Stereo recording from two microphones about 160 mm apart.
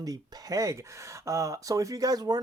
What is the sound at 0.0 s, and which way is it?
Speech, 20° right (ahead or behind).